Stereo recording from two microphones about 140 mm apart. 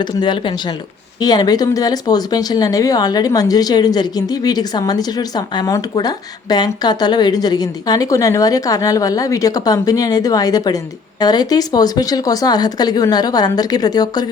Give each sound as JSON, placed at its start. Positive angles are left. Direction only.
{"t": 0.0, "sound": "speech", "side_deg": 30}